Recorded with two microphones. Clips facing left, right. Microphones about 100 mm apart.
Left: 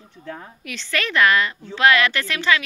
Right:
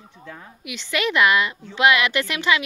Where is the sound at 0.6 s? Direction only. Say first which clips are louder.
Right 2 dB; 15° right (ahead or behind).